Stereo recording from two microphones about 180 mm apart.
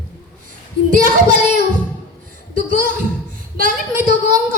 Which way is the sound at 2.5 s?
50° right (ahead or behind).